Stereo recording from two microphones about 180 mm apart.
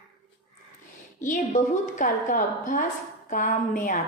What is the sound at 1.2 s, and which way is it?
A woman's voice, 45° left (ahead or behind).